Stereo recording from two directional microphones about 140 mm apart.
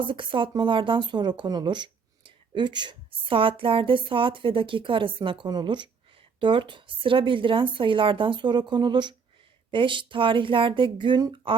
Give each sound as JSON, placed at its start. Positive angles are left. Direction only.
{"t": 0.0, "sound": "speech", "side_deg": -35}